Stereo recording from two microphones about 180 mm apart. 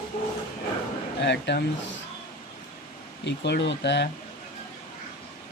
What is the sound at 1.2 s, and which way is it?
Speech, 70° left (ahead or behind).